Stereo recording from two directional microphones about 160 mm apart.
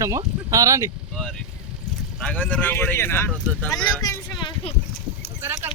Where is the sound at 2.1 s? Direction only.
5° left (ahead or behind).